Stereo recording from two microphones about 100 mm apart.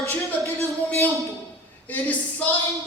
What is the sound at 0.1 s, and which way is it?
Speech, 25° left (ahead or behind).